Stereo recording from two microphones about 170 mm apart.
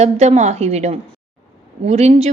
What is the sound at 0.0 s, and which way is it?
A woman's voice, 40° right (ahead or behind).